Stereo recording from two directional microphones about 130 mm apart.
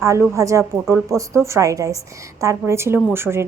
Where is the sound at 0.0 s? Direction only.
25° right (ahead or behind).